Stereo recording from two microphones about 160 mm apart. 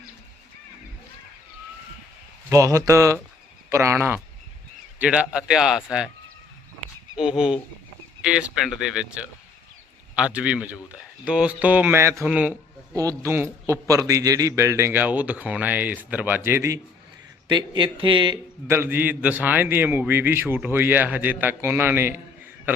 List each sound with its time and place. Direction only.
2.5 s a man's voice: 20° right (ahead or behind); by 6.1 s 5° right (ahead or behind)
7.2 s a man's voice: 5° right (ahead or behind)
12.9 s a man's voice: 20° right (ahead or behind)
17.5 s speech: 30° right (ahead or behind)
18.7 s a man's voice: 15° right (ahead or behind)